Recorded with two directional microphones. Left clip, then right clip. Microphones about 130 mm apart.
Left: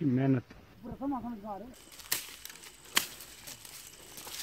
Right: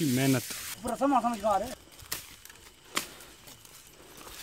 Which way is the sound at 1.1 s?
75° right (ahead or behind).